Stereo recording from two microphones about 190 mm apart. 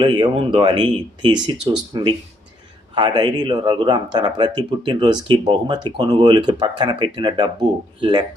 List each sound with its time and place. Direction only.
0.0 s speech: 25° right (ahead or behind)